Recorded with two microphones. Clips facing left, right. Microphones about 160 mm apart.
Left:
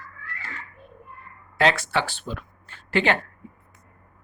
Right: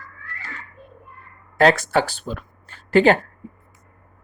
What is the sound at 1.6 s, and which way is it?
Speech, 45° right (ahead or behind).